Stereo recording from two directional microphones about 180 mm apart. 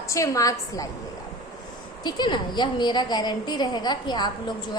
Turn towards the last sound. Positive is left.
turn(degrees=25)  # may be behind; listen again after turning